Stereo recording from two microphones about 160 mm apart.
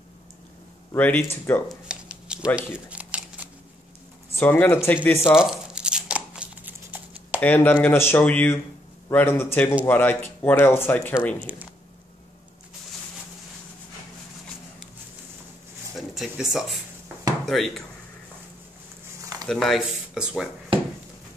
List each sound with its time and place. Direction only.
0.9 s speech: 10° left (ahead or behind)
1.9 s a sound: 5° right (ahead or behind)
4.4 s speech: 10° left (ahead or behind)
5.3 s tearing: 5° right (ahead or behind)
7.3 s speech: 10° left (ahead or behind)
11.4 s speech: 10° right (ahead or behind)
16.2 s speech: centre (ahead or behind)
19.4 s speech: centre (ahead or behind)